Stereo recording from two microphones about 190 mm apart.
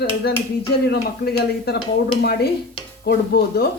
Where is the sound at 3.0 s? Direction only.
55° left (ahead or behind).